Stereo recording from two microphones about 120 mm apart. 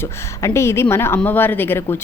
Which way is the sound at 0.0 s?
20° left (ahead or behind).